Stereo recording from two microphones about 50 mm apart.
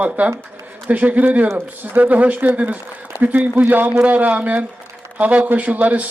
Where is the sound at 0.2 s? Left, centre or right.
Right.